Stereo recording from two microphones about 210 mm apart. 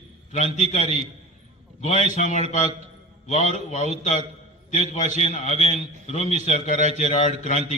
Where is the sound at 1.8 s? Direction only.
35° left (ahead or behind).